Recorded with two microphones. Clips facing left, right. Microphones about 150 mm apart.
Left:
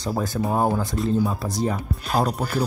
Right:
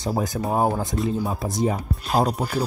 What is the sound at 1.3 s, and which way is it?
Speech, 20° right (ahead or behind).